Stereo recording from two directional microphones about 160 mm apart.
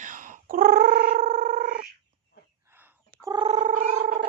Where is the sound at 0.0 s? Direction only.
55° right (ahead or behind).